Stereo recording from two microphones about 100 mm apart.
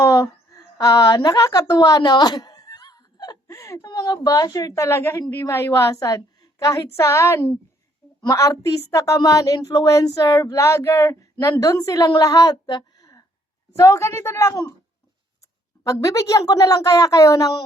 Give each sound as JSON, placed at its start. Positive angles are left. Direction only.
{"t": 0.0, "sound": "a sound", "side_deg": 30}
{"t": 0.8, "sound": "a woman's voice", "side_deg": 35}
{"t": 3.5, "sound": "a woman's voice", "side_deg": 30}
{"t": 15.9, "sound": "speech", "side_deg": 35}